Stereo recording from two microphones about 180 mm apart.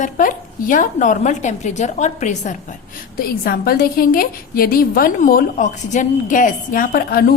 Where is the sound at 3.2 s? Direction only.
55° left (ahead or behind).